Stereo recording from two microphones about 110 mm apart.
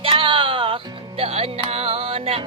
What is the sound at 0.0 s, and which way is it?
Music, 55° right (ahead or behind).